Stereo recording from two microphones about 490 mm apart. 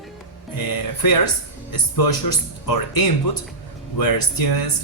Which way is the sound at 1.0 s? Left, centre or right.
Left.